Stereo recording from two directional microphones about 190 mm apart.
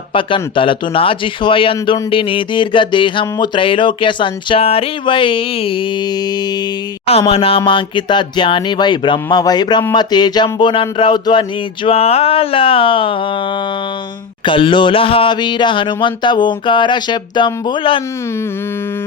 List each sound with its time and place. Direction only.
0.1 s speech: 25° left (ahead or behind)
7.1 s speech: 30° left (ahead or behind)
14.4 s speech: 25° left (ahead or behind)